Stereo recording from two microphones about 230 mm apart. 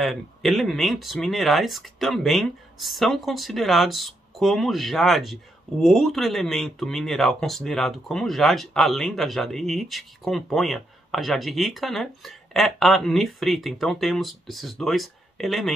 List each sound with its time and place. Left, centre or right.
0.0 s speech: centre